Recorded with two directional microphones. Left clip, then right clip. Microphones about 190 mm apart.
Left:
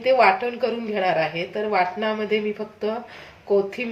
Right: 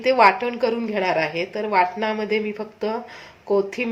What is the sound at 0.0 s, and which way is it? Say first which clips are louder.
Speech: right 1 dB; 35° right (ahead or behind).